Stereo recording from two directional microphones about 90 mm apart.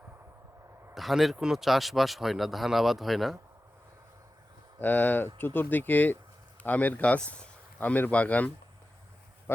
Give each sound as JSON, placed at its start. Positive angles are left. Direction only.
{"t": 0.9, "sound": "speech", "side_deg": 0}
{"t": 4.8, "sound": "speech", "side_deg": 20}